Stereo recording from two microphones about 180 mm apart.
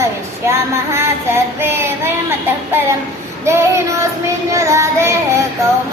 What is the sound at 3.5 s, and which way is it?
Child singing, 15° right (ahead or behind).